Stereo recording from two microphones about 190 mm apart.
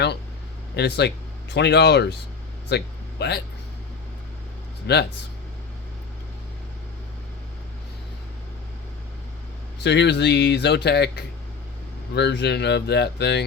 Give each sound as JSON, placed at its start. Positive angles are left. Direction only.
{"t": 0.8, "sound": "speech", "side_deg": 60}
{"t": 2.6, "sound": "a sound", "side_deg": 60}
{"t": 4.9, "sound": "speech", "side_deg": 60}
{"t": 9.8, "sound": "speech", "side_deg": 65}